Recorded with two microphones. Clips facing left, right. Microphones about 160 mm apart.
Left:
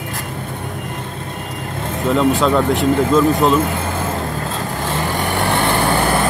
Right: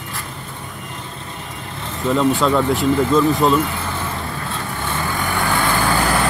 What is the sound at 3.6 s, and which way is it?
Vehicle, 45° left (ahead or behind).